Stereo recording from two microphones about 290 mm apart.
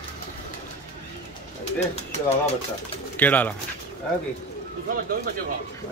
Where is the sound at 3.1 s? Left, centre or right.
Centre.